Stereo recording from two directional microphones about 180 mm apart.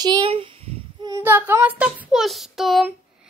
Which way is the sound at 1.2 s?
10° right (ahead or behind).